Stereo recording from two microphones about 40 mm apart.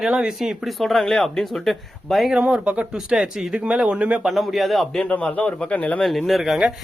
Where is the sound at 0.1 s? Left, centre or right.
Right.